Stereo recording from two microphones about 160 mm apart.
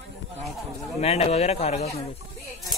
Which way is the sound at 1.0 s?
40° left (ahead or behind).